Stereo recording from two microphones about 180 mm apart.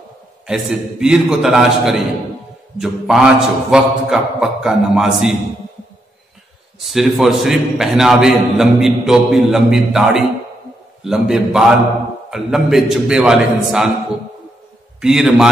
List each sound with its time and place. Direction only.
0.5 s a man's voice: 5° right (ahead or behind)
6.8 s a man's voice: centre (ahead or behind)
15.0 s a man's voice: 5° right (ahead or behind)